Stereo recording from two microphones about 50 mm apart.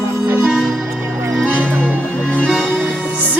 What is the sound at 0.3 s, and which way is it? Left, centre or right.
Music, right.